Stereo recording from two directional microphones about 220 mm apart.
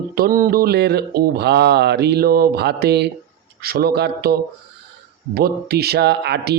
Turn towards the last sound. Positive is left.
turn(degrees=-50)  # may be behind; listen again after turning